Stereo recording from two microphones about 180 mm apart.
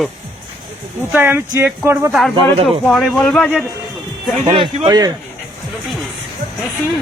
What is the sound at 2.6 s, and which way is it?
A man's voice, centre (ahead or behind).